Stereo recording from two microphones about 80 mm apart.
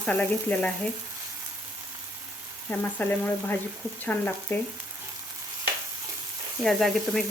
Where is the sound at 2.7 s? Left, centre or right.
Centre.